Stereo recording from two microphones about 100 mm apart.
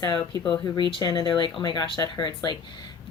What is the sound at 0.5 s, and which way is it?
A woman's voice, 40° left (ahead or behind).